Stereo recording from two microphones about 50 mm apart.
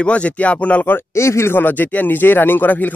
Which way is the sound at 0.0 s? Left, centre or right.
Left.